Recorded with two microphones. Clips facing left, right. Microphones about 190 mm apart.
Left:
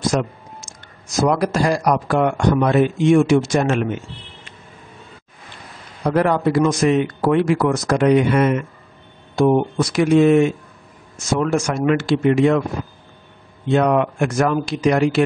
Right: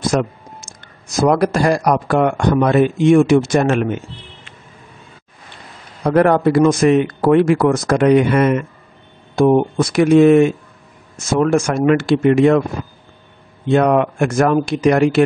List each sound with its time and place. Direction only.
0.1 s speech: 55° right (ahead or behind)
6.0 s speech: 55° right (ahead or behind)
13.7 s speech: 50° right (ahead or behind)